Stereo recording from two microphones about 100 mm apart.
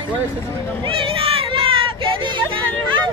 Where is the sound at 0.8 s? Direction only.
65° right (ahead or behind).